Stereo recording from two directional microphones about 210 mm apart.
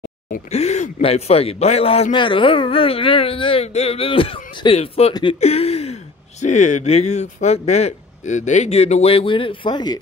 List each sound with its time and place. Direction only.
0.3 s speech: 30° left (ahead or behind)